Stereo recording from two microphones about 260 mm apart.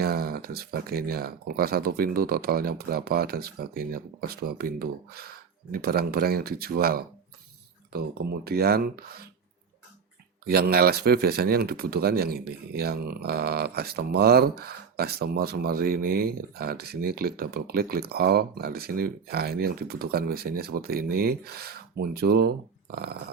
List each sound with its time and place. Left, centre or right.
0.0 s speech: right
10.4 s speech: right